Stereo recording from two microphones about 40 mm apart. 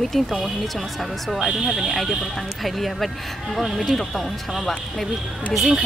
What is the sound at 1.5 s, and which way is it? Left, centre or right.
Speech, centre.